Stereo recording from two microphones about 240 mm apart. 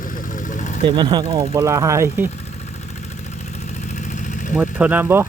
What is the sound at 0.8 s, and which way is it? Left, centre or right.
Speech, centre.